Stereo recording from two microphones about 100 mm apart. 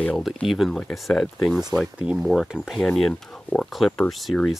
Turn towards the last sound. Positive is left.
turn(degrees=0)  # may be behind; listen again after turning